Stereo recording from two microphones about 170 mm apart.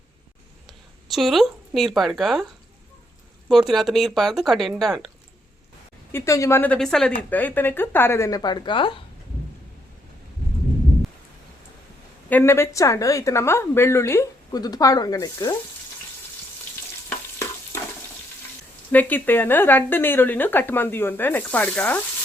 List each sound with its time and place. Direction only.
0.7 s speech: centre (ahead or behind)
3.5 s speech: centre (ahead or behind)
6.1 s a woman's voice: 15° left (ahead or behind)
12.3 s a woman's voice: 15° left (ahead or behind)
18.9 s a woman's voice: 10° left (ahead or behind)